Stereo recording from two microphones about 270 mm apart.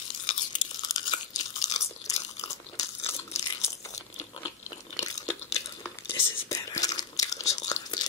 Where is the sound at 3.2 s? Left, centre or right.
Centre.